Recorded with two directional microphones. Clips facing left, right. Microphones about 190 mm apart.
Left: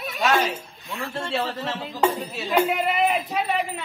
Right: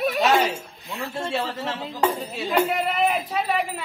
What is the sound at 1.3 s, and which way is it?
A man's voice, 10° right (ahead or behind).